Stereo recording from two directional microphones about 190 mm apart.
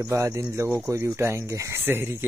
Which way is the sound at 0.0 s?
15° right (ahead or behind).